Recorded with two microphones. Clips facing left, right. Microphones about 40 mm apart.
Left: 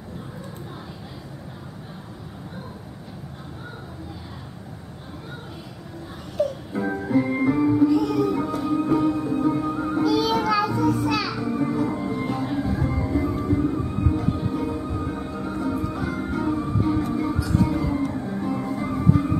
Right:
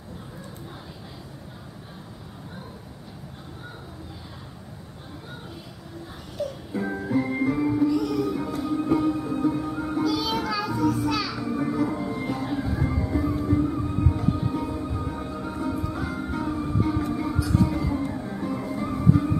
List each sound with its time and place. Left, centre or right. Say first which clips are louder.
6.7 s music: left 3 dB; centre
8.0 s music: left 4 dB; left
8.6 s music: left 2 dB; centre